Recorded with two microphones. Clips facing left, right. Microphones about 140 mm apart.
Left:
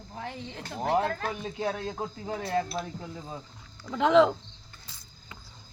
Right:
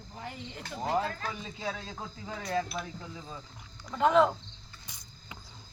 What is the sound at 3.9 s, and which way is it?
Speech, 90° left.